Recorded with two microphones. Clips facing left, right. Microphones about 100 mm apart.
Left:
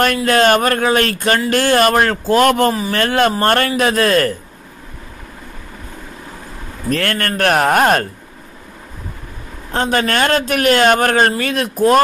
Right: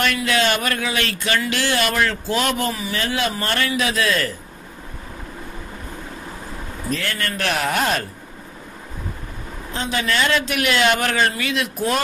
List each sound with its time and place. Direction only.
0.0 s a man's voice: 45° left (ahead or behind)
6.9 s a man's voice: 60° left (ahead or behind)
9.7 s a man's voice: 50° left (ahead or behind)